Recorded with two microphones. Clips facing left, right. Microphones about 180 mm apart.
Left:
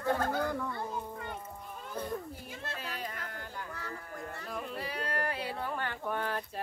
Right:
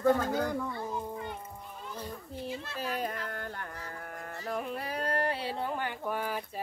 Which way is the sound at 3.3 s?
60° right (ahead or behind).